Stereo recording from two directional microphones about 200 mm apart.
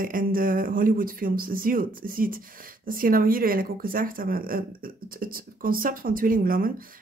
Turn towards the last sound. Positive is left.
turn(degrees=-45)  # may be behind; listen again after turning